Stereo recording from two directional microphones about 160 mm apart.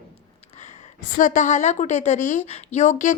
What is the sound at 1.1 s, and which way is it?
A woman's voice, 55° left (ahead or behind).